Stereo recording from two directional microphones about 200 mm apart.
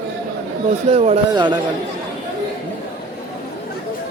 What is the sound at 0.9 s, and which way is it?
Speech, 35° right (ahead or behind).